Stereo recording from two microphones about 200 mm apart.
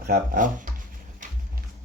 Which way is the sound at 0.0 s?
45° right (ahead or behind).